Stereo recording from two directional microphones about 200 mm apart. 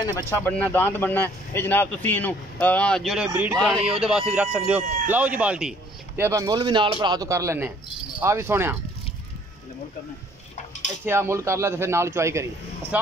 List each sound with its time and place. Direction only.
0.3 s a man's voice: 10° left (ahead or behind); by 8.7 s 10° right (ahead or behind)
11.1 s a man's voice: 15° right (ahead or behind)